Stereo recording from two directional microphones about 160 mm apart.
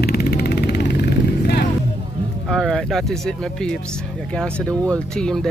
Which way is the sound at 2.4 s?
Centre (ahead or behind).